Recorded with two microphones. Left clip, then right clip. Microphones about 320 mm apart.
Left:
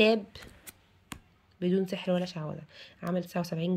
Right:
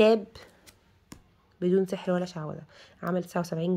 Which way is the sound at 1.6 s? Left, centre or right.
Centre.